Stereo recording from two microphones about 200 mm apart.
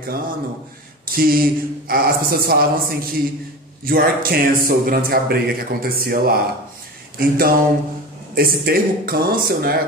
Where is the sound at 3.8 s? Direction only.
45° right (ahead or behind).